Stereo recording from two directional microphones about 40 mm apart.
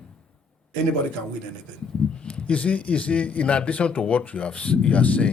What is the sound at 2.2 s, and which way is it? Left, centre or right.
A man's voice, left.